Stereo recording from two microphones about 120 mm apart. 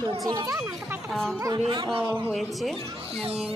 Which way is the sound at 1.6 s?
45° right (ahead or behind).